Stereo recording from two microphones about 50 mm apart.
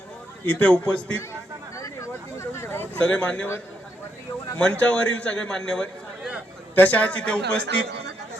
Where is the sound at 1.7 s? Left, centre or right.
Left.